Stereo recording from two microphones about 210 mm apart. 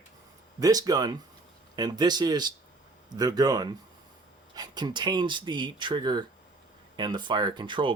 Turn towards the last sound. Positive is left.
turn(degrees=-20)  # may be behind; listen again after turning